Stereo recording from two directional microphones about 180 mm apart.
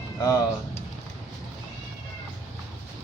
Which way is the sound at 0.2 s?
20° left (ahead or behind).